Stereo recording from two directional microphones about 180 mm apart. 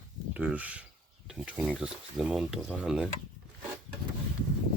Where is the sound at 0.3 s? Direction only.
10° right (ahead or behind).